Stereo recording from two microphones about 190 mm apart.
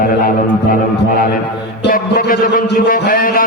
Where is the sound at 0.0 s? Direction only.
45° left (ahead or behind).